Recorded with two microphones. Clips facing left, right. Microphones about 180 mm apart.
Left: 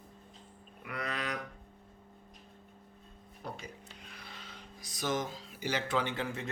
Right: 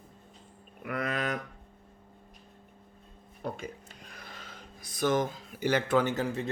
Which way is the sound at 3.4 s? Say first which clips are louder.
Right 7 dB; 50° right (ahead or behind).